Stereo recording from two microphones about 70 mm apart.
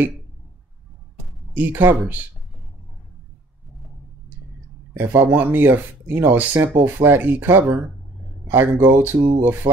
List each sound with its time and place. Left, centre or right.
1.5 s speech: right
4.9 s speech: right